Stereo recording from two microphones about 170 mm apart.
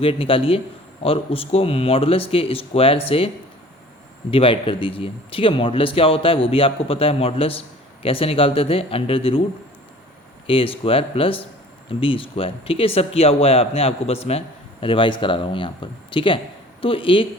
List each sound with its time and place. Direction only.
0.0 s speech: 30° left (ahead or behind)
4.3 s speech: 30° left (ahead or behind)
10.4 s speech: 30° left (ahead or behind)